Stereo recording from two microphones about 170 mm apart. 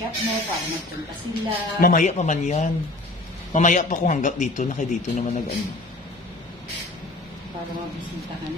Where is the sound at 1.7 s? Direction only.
50° left (ahead or behind).